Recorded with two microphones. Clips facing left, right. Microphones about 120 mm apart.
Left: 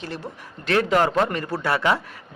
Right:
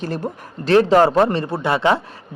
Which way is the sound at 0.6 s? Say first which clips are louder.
Right 7 dB; 30° right (ahead or behind).